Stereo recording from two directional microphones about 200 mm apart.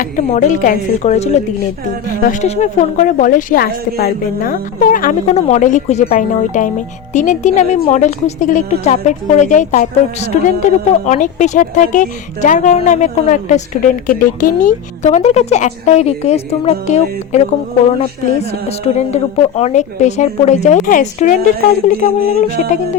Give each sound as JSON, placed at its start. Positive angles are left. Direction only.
{"t": 0.0, "sound": "a woman's voice", "side_deg": 40}
{"t": 18.9, "sound": "a woman's voice", "side_deg": 30}